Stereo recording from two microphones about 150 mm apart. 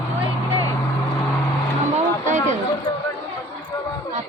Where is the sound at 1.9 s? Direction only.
50° right (ahead or behind).